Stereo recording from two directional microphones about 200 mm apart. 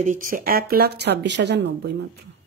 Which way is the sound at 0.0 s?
40° right (ahead or behind).